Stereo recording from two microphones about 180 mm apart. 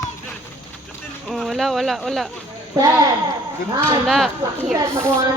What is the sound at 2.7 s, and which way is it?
Speech, 20° right (ahead or behind).